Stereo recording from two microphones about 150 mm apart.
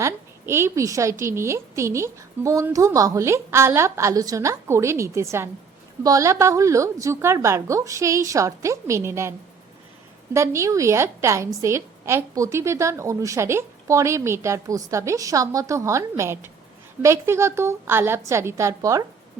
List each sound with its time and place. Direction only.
0.0 s a sound: 15° right (ahead or behind)
1.2 s a woman's voice: 20° right (ahead or behind)
10.3 s a woman's voice: 20° right (ahead or behind)